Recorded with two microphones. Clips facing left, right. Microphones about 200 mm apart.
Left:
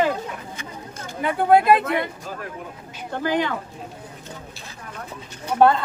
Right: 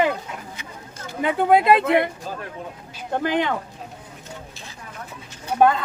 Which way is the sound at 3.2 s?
20° right (ahead or behind).